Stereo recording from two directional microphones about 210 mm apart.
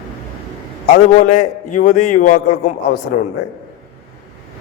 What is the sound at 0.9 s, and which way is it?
A man's voice, 35° left (ahead or behind).